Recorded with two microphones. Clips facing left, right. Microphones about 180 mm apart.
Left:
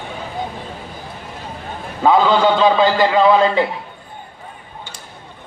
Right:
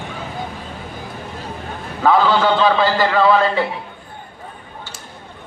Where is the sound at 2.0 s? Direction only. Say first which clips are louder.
Left 1 dB; 15° left (ahead or behind).